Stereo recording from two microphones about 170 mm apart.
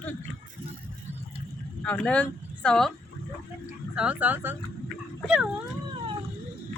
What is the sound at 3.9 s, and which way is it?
Speech, 5° right (ahead or behind).